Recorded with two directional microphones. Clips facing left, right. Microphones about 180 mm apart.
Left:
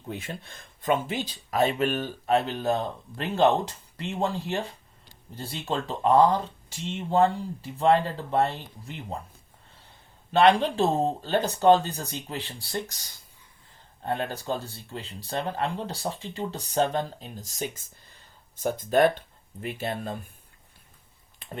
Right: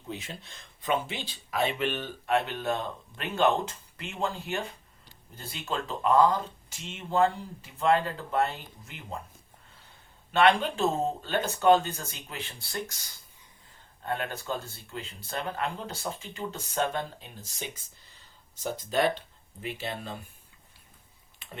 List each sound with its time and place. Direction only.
0.1 s speech: 55° left (ahead or behind); by 9.1 s 35° left (ahead or behind)
10.3 s speech: 35° left (ahead or behind)